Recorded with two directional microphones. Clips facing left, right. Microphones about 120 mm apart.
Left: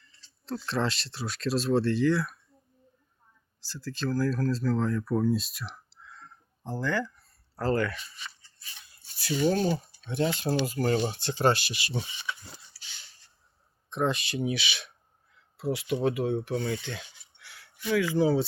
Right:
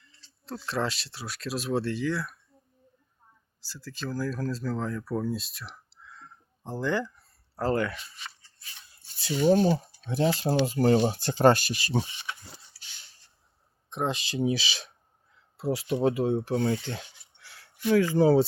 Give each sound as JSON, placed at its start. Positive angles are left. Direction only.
{"t": 0.4, "sound": "speech", "side_deg": -10}
{"t": 3.6, "sound": "speech", "side_deg": -5}
{"t": 6.6, "sound": "speech", "side_deg": -20}
{"t": 9.3, "sound": "speech", "side_deg": -10}
{"t": 10.1, "sound": "speech", "side_deg": -35}
{"t": 12.7, "sound": "a sound", "side_deg": 90}
{"t": 13.9, "sound": "speech", "side_deg": -20}